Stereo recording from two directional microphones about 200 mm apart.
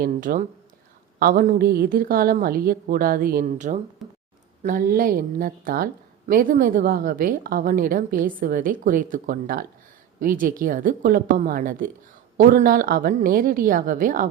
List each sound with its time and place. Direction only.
0.0 s speech: 45° right (ahead or behind)
4.0 s a sound: centre (ahead or behind)
4.6 s speech: 45° right (ahead or behind)